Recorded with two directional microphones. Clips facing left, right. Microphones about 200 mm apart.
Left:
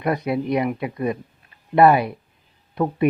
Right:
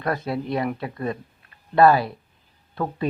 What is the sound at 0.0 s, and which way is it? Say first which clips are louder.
Speech: left 4 dB; 20° left (ahead or behind).